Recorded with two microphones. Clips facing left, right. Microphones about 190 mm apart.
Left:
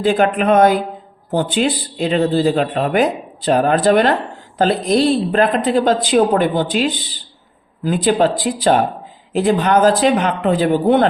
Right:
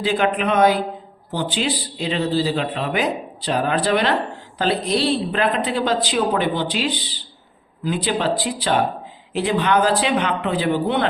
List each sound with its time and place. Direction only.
0.0 s a man's voice: 45° left (ahead or behind)